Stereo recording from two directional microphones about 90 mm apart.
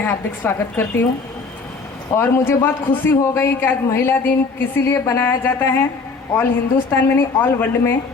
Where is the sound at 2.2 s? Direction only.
25° left (ahead or behind).